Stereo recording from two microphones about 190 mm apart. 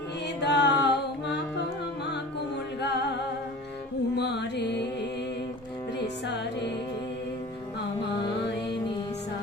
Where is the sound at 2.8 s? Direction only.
60° left (ahead or behind).